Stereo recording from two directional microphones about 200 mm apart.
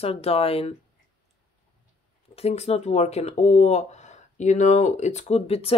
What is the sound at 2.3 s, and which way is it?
Speech, 30° left (ahead or behind).